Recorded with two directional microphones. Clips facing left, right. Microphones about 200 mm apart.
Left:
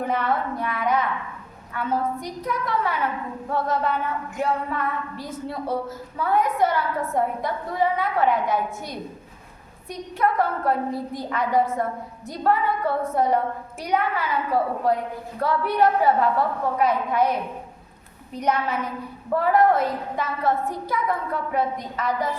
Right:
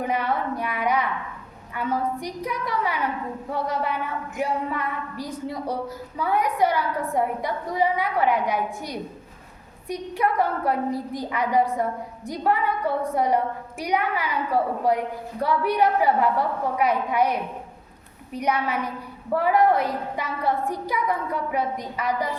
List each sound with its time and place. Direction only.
0.0 s a woman's voice: 15° right (ahead or behind)
18.3 s a woman's voice: 10° right (ahead or behind)